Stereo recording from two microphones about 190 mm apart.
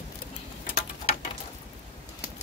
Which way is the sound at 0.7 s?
35° left (ahead or behind).